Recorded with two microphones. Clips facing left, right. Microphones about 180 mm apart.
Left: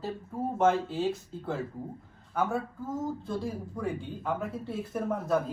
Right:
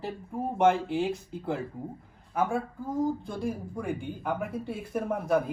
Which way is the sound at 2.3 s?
Centre (ahead or behind).